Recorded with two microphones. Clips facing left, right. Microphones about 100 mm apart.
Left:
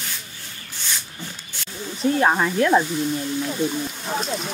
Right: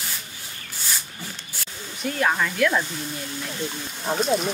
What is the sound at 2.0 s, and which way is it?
Speech, 30° left (ahead or behind).